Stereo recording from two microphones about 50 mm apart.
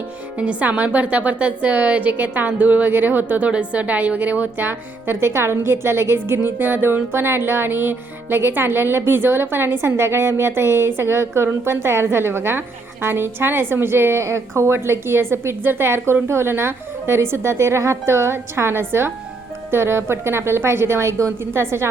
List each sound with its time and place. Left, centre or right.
0.3 s a woman's voice: right
14.2 s speech: right